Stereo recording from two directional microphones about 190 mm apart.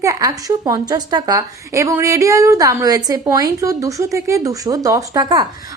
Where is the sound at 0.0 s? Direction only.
15° right (ahead or behind).